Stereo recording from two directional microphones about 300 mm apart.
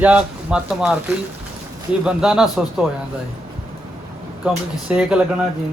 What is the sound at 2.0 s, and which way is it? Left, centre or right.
Speech, centre.